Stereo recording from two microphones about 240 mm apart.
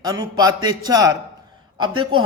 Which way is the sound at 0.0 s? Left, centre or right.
Centre.